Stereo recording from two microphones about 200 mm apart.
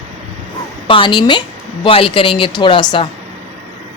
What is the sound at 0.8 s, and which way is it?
A woman's voice, 25° left (ahead or behind).